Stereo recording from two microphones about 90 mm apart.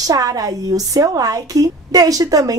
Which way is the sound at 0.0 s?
40° right (ahead or behind).